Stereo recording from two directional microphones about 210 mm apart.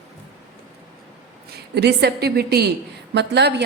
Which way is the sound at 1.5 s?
50° right (ahead or behind).